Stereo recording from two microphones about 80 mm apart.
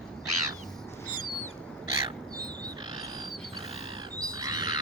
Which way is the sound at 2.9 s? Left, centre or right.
Right.